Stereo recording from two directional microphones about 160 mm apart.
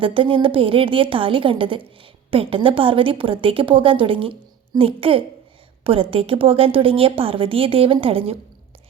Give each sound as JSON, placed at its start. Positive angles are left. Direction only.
{"t": 0.0, "sound": "a woman's voice", "side_deg": -35}